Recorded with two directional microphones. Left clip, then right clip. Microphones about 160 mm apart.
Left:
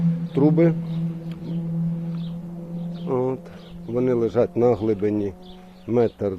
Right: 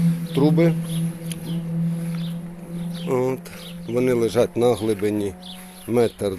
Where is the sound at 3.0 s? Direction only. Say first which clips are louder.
Right 2 dB; 10° right (ahead or behind).